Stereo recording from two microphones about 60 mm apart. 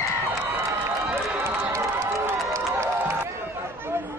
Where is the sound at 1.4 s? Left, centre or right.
Right.